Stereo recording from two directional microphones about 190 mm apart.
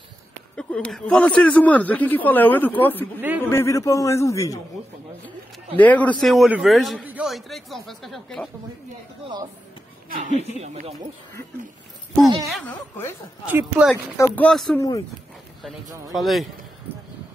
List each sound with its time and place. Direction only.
0.6 s speech: 5° left (ahead or behind)
3.2 s speech: 10° right (ahead or behind)
3.4 s speech: 15° left (ahead or behind)
5.8 s a man's voice: 10° left (ahead or behind)
10.6 s speech: 35° right (ahead or behind)
12.4 s a man's voice: centre (ahead or behind)
14.1 s speech: 10° left (ahead or behind)
14.8 s speech: 15° left (ahead or behind)
16.1 s a man's voice: centre (ahead or behind)